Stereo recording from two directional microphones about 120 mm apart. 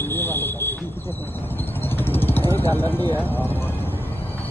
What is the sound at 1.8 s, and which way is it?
Vehicle, 15° left (ahead or behind).